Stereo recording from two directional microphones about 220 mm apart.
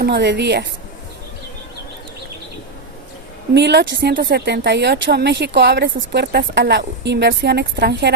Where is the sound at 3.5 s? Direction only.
50° right (ahead or behind).